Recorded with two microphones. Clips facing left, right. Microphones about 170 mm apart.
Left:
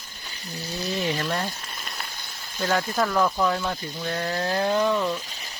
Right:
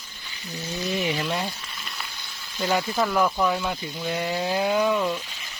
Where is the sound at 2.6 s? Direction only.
10° right (ahead or behind).